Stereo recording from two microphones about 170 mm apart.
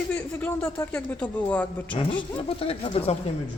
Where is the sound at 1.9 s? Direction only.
30° left (ahead or behind).